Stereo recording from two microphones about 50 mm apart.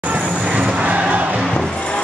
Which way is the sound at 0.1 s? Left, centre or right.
Right.